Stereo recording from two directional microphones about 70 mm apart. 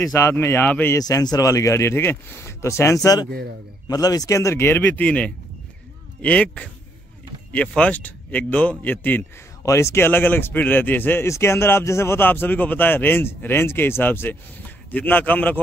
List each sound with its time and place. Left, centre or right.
0.0 s speech: left
0.3 s speech: left
0.9 s speech: left
1.5 s speech: left
3.8 s speech: left
4.6 s a man's voice: left
9.6 s speech: left
10.0 s a man's voice: left
11.2 s a man's voice: left